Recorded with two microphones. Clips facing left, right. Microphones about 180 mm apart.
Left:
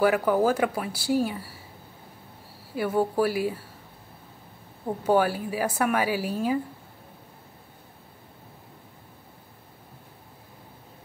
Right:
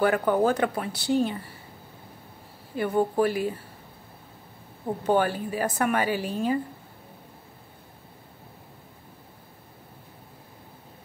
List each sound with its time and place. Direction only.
0.0 s a woman's voice: 5° left (ahead or behind)
2.7 s a woman's voice: 5° left (ahead or behind)
4.8 s a woman's voice: 5° left (ahead or behind)